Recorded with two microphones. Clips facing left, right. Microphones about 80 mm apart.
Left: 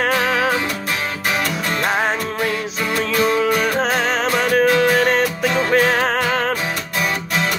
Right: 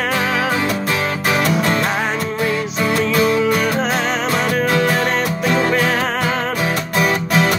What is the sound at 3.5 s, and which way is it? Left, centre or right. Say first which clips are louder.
Music: even; left.